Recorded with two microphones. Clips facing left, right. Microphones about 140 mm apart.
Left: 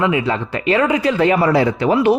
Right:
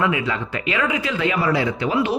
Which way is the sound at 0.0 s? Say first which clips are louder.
Left 4 dB; 30° left (ahead or behind).